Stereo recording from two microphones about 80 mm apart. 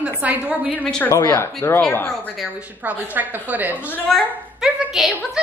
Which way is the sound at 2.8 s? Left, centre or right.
Right.